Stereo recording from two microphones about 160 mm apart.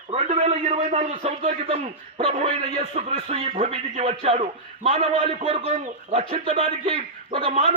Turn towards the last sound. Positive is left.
turn(degrees=-35)  # may be behind; listen again after turning